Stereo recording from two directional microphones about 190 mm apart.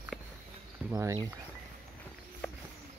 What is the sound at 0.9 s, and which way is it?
Speech, 20° right (ahead or behind).